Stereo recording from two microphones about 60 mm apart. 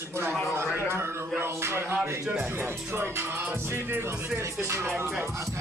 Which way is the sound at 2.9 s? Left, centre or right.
Right.